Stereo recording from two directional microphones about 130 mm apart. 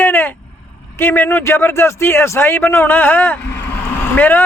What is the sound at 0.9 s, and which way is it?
A man's voice, 15° left (ahead or behind).